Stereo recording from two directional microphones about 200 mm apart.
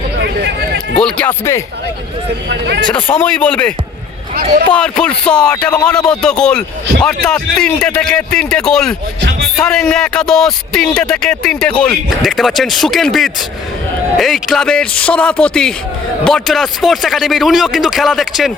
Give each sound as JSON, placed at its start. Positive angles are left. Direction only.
{"t": 0.9, "sound": "speech", "side_deg": 5}
{"t": 2.5, "sound": "speech", "side_deg": -60}
{"t": 2.9, "sound": "speech", "side_deg": 10}